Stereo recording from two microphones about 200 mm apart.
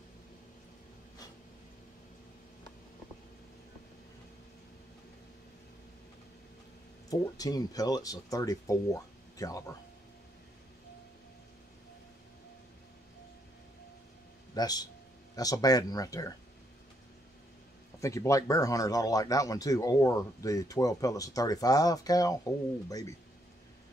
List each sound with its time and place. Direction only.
7.1 s speech: 20° left (ahead or behind)
14.5 s speech: 20° left (ahead or behind)
18.0 s speech: 15° left (ahead or behind)